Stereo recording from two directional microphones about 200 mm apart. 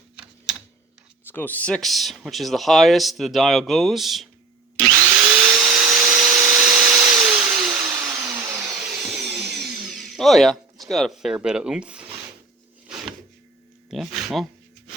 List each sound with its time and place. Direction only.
1.3 s speech: 10° left (ahead or behind)
4.8 s drill: 15° right (ahead or behind)
5.1 s drill: 5° right (ahead or behind)
5.9 s vacuum cleaner: 5° right (ahead or behind)
8.7 s a sound: centre (ahead or behind)
9.5 s tools: centre (ahead or behind)
12.9 s drawer open or close: centre (ahead or behind)
13.9 s speech: centre (ahead or behind)